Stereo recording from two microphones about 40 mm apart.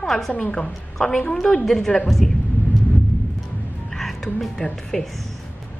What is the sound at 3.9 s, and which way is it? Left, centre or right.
Music, centre.